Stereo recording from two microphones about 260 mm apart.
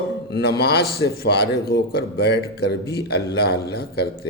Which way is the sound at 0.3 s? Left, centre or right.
Left.